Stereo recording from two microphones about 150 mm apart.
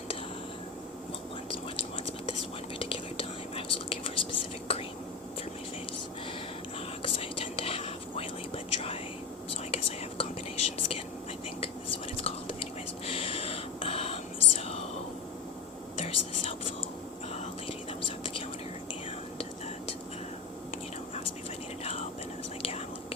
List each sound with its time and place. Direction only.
2.7 s whispering: 40° left (ahead or behind)
7.0 s whispering: 35° left (ahead or behind)
12.1 s whispering: 40° left (ahead or behind)
13.1 s a sound: 40° left (ahead or behind)
14.6 s whispering: 40° left (ahead or behind)
16.0 s whispering: 45° left (ahead or behind)